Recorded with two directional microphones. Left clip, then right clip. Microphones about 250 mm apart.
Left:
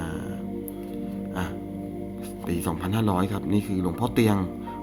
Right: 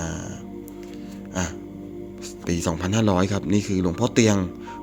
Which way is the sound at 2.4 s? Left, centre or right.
Centre.